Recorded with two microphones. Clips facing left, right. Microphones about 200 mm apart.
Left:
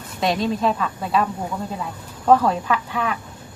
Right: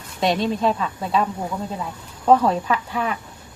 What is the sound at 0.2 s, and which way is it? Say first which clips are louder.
Speech: right 1 dB; centre (ahead or behind).